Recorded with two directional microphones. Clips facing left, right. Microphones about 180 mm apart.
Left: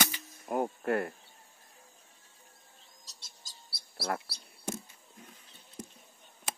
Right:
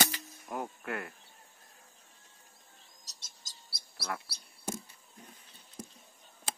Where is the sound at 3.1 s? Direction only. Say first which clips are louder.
Left 2 dB; 45° right (ahead or behind).